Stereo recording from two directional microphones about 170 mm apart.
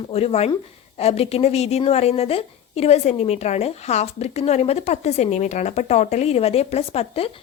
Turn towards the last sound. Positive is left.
turn(degrees=35)  # may be behind; listen again after turning